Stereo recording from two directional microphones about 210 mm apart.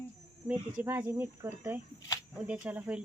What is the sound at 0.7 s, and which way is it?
Speech, 10° right (ahead or behind).